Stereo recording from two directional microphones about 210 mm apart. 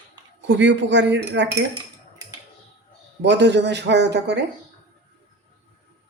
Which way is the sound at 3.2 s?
55° right (ahead or behind).